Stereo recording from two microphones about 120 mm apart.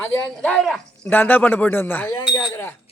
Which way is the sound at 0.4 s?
5° left (ahead or behind).